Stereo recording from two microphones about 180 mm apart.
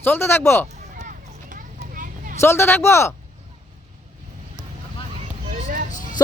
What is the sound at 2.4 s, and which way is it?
Speech, 15° left (ahead or behind).